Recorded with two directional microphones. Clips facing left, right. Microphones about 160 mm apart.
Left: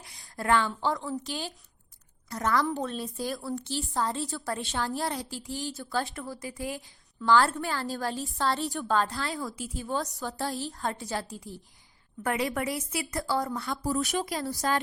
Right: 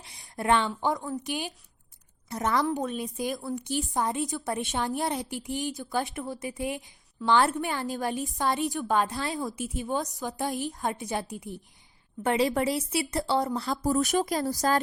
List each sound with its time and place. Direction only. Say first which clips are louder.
0.0 s a sound: right 2 dB; 20° right (ahead or behind)
0.7 s a woman's voice: right 1 dB; 20° right (ahead or behind)
13.8 s speech: right 4 dB; 45° right (ahead or behind)